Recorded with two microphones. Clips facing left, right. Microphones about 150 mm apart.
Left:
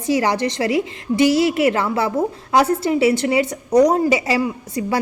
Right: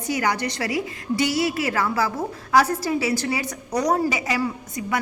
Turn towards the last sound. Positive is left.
turn(degrees=30)  # may be behind; listen again after turning